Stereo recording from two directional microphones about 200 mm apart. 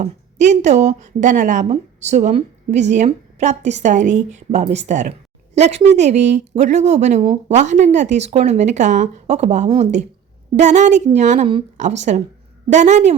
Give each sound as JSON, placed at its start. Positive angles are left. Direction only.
{"t": 0.0, "sound": "speech", "side_deg": -35}